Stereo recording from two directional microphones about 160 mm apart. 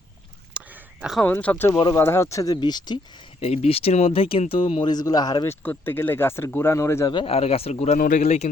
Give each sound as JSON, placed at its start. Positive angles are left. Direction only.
{"t": 0.5, "sound": "a sound", "side_deg": -5}
{"t": 1.2, "sound": "speech", "side_deg": 10}
{"t": 3.4, "sound": "speech", "side_deg": 40}
{"t": 5.6, "sound": "speech", "side_deg": 15}
{"t": 7.1, "sound": "a man's voice", "side_deg": 35}